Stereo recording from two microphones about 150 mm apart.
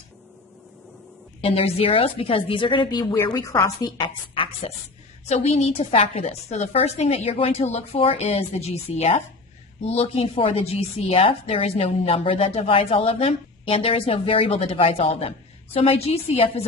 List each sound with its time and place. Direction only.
1.4 s a woman's voice: 40° left (ahead or behind)
5.3 s a woman's voice: 45° left (ahead or behind)